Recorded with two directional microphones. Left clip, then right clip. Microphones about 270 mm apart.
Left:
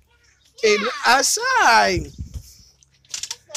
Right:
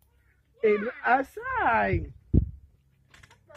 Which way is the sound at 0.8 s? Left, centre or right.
Centre.